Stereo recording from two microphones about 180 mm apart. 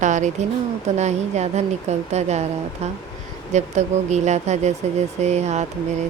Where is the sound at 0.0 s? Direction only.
45° right (ahead or behind).